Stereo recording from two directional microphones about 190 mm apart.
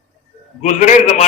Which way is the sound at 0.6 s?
40° left (ahead or behind).